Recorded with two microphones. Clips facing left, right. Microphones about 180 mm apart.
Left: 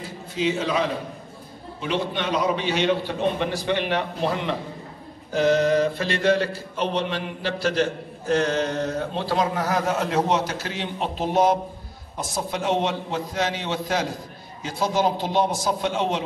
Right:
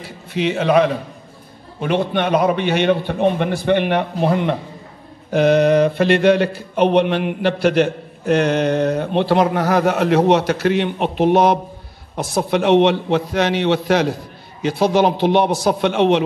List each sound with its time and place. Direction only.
0.0 s a man's voice: 70° right (ahead or behind)
1.8 s mantra: 55° right (ahead or behind)
12.2 s a man's voice: 70° right (ahead or behind)